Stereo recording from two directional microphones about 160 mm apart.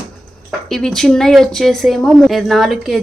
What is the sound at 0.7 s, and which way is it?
Speech, centre (ahead or behind).